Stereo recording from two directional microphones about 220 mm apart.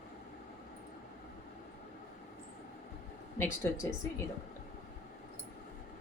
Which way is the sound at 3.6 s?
10° left (ahead or behind).